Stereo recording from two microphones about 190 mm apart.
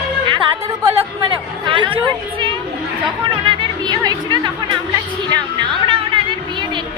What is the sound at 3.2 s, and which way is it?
Speech, 25° right (ahead or behind).